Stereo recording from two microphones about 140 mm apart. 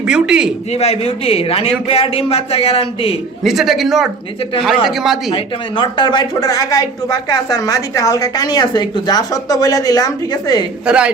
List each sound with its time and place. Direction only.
0.0 s speech: 5° right (ahead or behind)
0.7 s speech: 50° left (ahead or behind)
3.4 s speech: centre (ahead or behind)
5.3 s speech: 35° left (ahead or behind)
10.8 s a man's voice: 10° right (ahead or behind)